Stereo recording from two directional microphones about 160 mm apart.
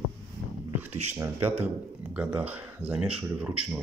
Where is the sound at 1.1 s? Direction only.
15° right (ahead or behind).